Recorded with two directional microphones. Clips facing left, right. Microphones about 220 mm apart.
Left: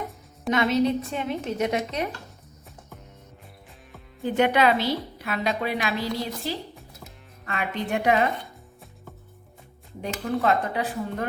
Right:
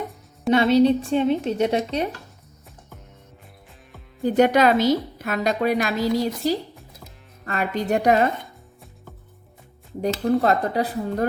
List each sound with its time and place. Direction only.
0.5 s speech: 30° right (ahead or behind)
4.3 s a woman's voice: 40° right (ahead or behind)
10.0 s speech: 35° right (ahead or behind)